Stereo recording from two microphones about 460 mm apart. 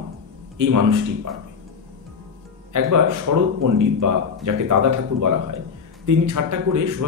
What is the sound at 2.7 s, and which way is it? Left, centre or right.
A man's voice, right.